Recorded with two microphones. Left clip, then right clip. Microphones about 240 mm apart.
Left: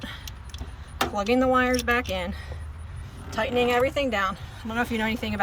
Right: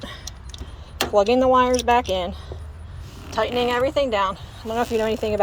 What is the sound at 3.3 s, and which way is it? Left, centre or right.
Speech, centre.